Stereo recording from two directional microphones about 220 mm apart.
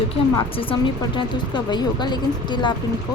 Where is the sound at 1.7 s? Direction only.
20° left (ahead or behind).